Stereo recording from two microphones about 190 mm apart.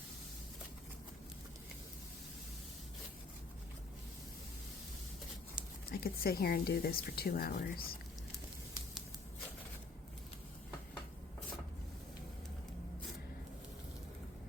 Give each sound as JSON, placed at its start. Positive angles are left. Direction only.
{"t": 5.9, "sound": "speech", "side_deg": 50}